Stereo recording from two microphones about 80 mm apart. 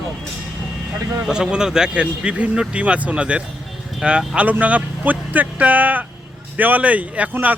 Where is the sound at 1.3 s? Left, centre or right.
Centre.